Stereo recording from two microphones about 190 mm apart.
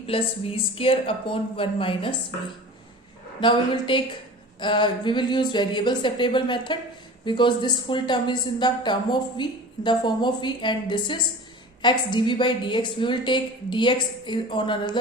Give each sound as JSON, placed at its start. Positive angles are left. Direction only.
{"t": 0.0, "sound": "speech", "side_deg": 30}
{"t": 3.4, "sound": "speech", "side_deg": 25}